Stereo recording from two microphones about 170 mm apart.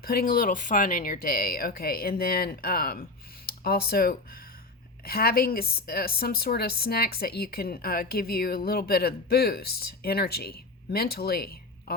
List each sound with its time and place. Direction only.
0.0 s a woman's voice: 60° left (ahead or behind)